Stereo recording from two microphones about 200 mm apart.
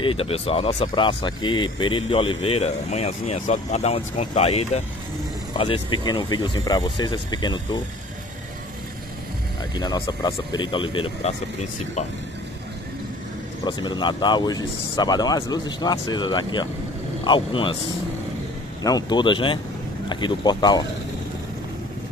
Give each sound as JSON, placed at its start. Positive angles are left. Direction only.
{"t": 0.0, "sound": "speech", "side_deg": 25}
{"t": 9.8, "sound": "speech", "side_deg": 20}
{"t": 13.7, "sound": "speech", "side_deg": 20}
{"t": 18.8, "sound": "speech", "side_deg": 20}